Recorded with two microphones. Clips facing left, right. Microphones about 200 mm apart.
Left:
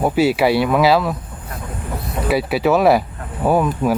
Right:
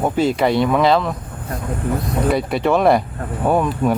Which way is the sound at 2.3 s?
5° left (ahead or behind).